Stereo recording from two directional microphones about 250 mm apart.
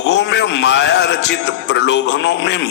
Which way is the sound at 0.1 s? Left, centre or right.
Left.